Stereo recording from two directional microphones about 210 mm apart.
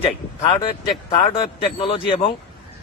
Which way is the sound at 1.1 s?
30° left (ahead or behind).